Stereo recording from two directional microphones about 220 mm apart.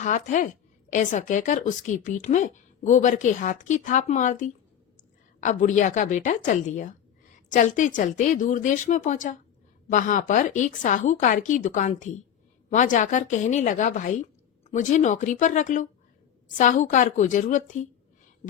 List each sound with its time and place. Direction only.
0.0 s speech: 35° left (ahead or behind)